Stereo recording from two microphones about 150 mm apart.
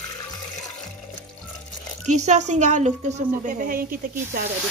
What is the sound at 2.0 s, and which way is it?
A woman's voice, 50° right (ahead or behind).